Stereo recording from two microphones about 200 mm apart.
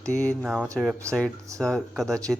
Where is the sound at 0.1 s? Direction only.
10° left (ahead or behind).